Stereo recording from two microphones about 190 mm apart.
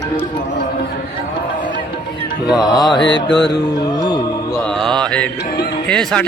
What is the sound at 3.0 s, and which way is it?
Mantra, 65° left (ahead or behind).